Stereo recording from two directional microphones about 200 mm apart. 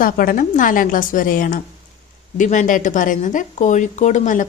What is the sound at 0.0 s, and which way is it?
A woman's voice, 45° left (ahead or behind).